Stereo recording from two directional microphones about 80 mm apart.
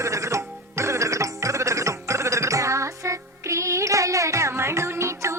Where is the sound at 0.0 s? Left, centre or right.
Right.